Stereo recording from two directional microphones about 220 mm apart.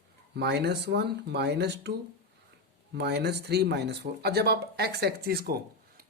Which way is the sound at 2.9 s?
50° right (ahead or behind).